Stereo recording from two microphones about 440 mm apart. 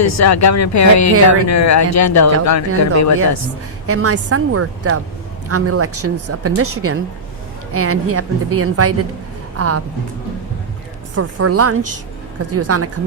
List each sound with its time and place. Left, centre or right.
0.0 s speech: left
3.8 s a woman's voice: right
11.1 s a woman's voice: right